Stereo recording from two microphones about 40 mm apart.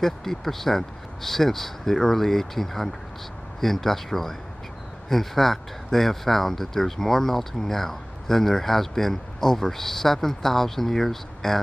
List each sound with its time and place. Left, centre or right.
0.0 s speech: centre